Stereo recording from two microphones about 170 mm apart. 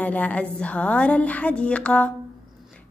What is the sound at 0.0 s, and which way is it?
A woman's voice, 10° left (ahead or behind).